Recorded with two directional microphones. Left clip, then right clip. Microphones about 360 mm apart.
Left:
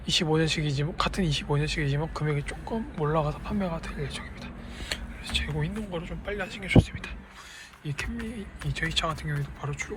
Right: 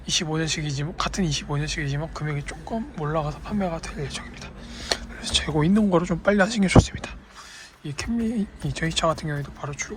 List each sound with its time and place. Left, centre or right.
0.0 s speech: centre